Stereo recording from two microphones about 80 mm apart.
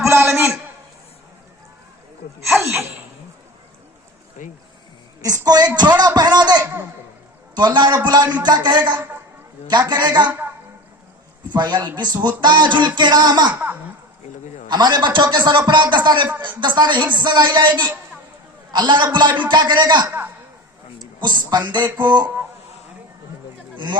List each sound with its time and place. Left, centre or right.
0.0 s a sound: right
5.5 s a man's voice: right
9.0 s a sound: right
9.6 s speech: right
10.2 s a woman's voice: right
11.5 s a man's voice: right
13.0 s speech: right
13.5 s a woman's voice: right
14.7 s a man's voice: right
20.1 s a sound: right
21.5 s speech: right
21.8 s a sound: right
23.7 s speech: right